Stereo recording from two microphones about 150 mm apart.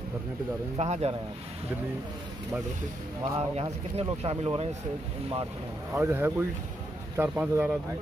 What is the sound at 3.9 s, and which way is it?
Speech, 45° right (ahead or behind).